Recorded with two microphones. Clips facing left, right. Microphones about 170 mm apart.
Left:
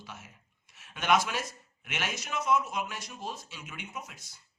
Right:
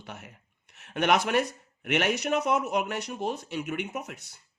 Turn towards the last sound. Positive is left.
turn(degrees=-65)  # may be behind; listen again after turning